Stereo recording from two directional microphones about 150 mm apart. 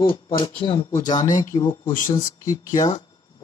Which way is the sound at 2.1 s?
25° left (ahead or behind).